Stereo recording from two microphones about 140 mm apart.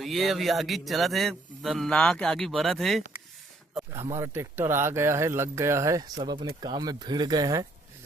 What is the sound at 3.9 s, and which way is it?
Speech, 20° right (ahead or behind).